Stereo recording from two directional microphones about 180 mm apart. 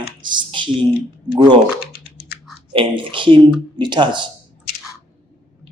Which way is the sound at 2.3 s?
60° left (ahead or behind).